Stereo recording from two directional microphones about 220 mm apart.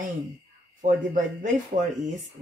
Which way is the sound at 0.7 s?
35° right (ahead or behind).